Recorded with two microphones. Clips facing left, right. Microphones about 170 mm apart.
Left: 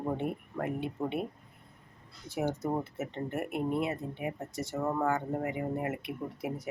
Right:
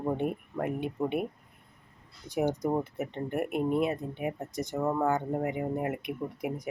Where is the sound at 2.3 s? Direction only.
15° right (ahead or behind).